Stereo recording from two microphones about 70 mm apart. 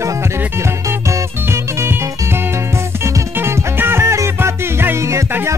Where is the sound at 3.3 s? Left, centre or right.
Right.